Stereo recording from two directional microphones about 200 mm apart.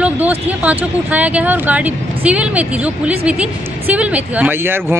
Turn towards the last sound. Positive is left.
turn(degrees=-10)  # may be behind; listen again after turning